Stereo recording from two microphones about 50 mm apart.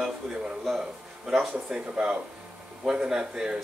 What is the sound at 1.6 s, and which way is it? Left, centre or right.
Speech, centre.